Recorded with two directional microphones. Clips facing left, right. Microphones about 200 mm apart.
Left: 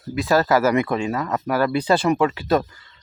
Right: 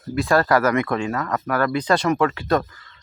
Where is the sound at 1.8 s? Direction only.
5° left (ahead or behind).